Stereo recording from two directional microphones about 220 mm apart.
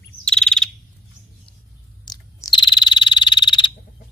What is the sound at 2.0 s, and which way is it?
Frog, 20° left (ahead or behind).